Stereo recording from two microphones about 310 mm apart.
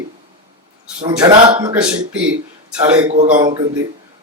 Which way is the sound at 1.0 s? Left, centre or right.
Centre.